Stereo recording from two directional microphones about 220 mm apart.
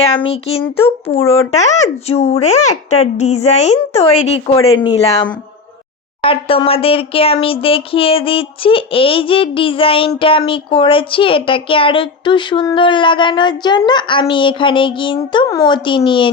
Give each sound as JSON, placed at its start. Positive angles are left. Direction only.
{"t": 0.2, "sound": "speech", "side_deg": 25}